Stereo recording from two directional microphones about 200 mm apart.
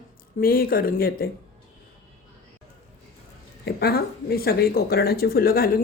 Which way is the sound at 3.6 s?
50° left (ahead or behind).